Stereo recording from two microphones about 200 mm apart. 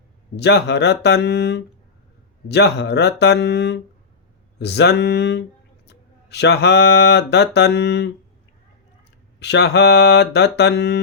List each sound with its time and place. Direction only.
0.3 s mantra: 60° left (ahead or behind)
5.9 s speech: 55° left (ahead or behind)
9.4 s mantra: 60° left (ahead or behind)